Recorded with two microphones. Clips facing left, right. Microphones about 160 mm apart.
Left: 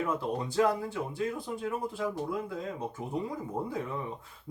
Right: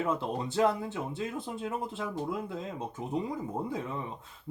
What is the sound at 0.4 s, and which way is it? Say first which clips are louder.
Speech: even; 25° right (ahead or behind).